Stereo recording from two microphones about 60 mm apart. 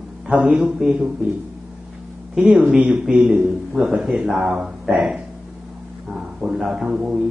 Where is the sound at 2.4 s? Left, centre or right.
Centre.